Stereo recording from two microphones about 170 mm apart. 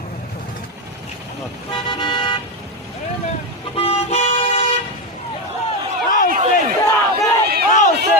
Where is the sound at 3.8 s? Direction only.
35° left (ahead or behind).